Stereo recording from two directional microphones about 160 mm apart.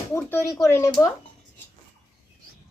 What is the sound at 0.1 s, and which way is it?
Speech, 10° left (ahead or behind).